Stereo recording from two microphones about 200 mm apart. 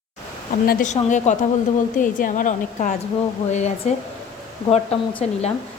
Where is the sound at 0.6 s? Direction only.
45° left (ahead or behind).